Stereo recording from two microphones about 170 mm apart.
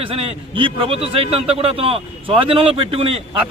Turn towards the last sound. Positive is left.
turn(degrees=-35)  # may be behind; listen again after turning